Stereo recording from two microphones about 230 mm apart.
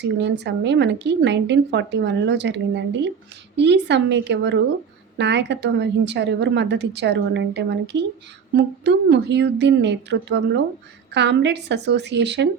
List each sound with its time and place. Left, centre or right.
0.0 s speech: right